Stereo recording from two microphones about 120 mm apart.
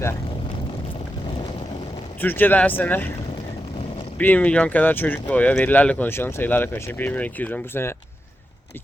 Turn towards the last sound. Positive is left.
turn(degrees=20)  # may be behind; listen again after turning